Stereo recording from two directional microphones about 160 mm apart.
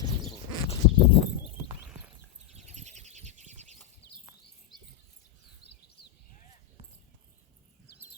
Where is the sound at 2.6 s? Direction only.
45° right (ahead or behind).